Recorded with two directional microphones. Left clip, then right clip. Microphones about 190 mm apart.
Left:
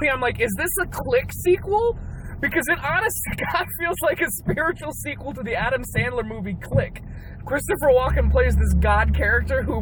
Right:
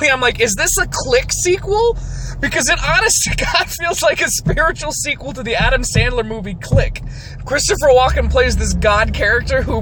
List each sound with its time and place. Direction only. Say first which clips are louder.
0.0 s speech: right 8 dB; 25° right (ahead or behind)